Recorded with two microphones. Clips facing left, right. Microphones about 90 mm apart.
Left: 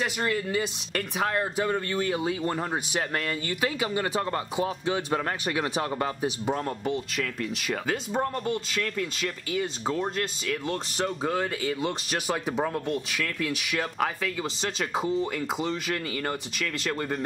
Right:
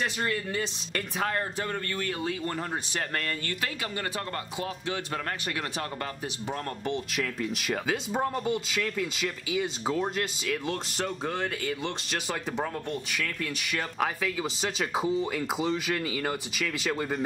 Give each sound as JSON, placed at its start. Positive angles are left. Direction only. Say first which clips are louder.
{"t": 0.0, "sound": "speech", "louder": "left 2 dB", "side_deg": 5}
{"t": 6.5, "sound": "speech", "louder": "left 3 dB", "side_deg": 0}